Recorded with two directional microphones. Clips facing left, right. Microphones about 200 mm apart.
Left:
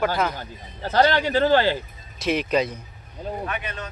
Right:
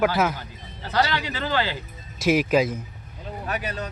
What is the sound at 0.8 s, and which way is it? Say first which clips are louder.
Speech: left 5 dB; 45° left (ahead or behind).